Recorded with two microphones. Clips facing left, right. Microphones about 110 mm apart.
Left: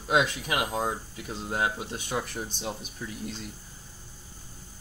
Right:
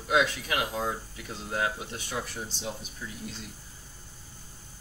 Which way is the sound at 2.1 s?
50° left (ahead or behind).